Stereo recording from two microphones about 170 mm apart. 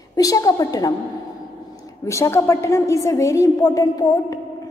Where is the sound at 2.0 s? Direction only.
15° left (ahead or behind).